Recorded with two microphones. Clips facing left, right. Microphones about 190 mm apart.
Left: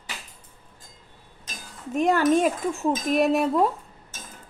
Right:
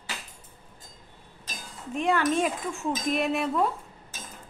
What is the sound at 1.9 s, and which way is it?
Dishes, 40° left (ahead or behind).